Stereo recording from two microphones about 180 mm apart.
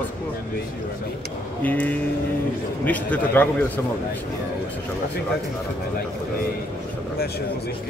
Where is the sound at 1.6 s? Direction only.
10° left (ahead or behind).